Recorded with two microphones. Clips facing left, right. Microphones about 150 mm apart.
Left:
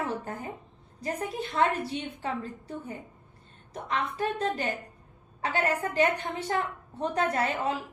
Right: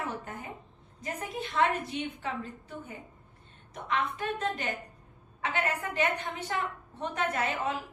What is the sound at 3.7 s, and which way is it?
A woman's voice, 35° left (ahead or behind).